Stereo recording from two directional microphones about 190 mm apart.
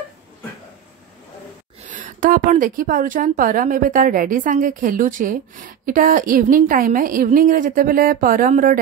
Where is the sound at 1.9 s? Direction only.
45° right (ahead or behind).